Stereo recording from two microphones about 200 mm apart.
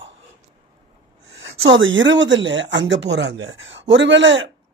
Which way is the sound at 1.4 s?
70° right (ahead or behind).